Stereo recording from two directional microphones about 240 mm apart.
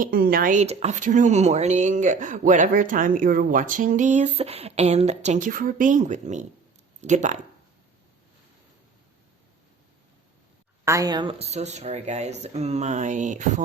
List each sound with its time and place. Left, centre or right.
0.0 s speech: right
10.8 s speech: centre; by 13.6 s right